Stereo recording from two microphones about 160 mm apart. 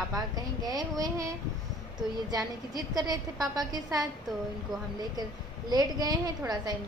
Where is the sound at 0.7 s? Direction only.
25° right (ahead or behind).